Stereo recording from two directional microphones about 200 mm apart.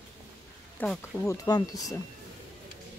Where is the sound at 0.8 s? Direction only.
10° left (ahead or behind).